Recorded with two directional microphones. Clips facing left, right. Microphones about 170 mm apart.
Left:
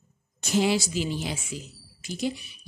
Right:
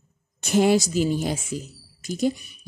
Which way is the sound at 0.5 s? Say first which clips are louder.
Right 5 dB; 50° right (ahead or behind).